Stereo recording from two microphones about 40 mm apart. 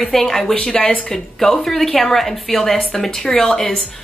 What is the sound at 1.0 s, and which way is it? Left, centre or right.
A woman's voice, centre.